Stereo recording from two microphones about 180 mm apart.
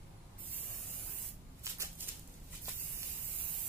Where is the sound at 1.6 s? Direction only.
15° right (ahead or behind).